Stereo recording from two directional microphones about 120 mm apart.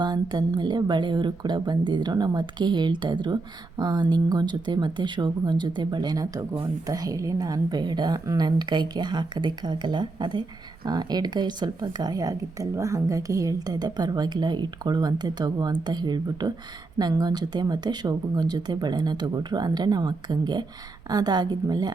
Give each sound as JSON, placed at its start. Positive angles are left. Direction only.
{"t": 0.0, "sound": "speech", "side_deg": -35}